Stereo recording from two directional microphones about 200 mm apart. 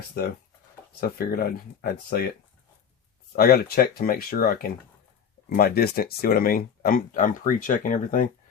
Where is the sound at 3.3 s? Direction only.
50° left (ahead or behind).